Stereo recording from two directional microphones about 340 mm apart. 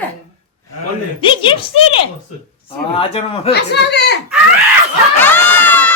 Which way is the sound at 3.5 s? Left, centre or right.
Left.